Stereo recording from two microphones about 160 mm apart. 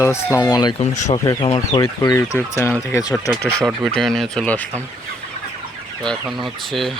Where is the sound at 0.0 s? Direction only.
15° left (ahead or behind).